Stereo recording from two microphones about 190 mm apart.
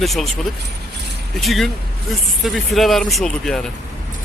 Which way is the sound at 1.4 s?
Centre (ahead or behind).